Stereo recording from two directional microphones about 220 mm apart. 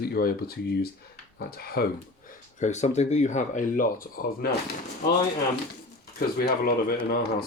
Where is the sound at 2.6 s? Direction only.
30° left (ahead or behind).